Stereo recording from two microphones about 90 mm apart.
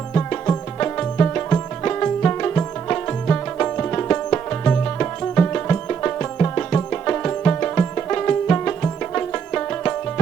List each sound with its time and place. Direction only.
0.1 s music: 15° left (ahead or behind)